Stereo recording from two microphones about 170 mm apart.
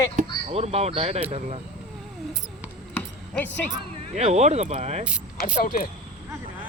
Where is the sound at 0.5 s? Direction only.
40° right (ahead or behind).